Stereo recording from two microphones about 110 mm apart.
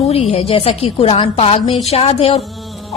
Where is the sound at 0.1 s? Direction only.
65° left (ahead or behind).